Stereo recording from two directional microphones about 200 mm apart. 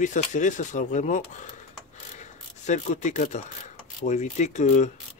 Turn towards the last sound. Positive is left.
turn(degrees=35)  # may be behind; listen again after turning